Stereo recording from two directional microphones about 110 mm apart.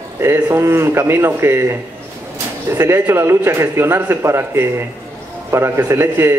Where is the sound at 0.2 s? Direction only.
25° right (ahead or behind).